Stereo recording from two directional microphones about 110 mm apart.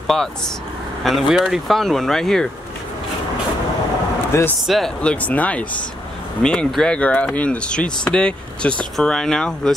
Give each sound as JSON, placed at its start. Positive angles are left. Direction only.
{"t": 0.0, "sound": "speech", "side_deg": 5}
{"t": 4.3, "sound": "speech", "side_deg": 25}
{"t": 4.6, "sound": "speech", "side_deg": 0}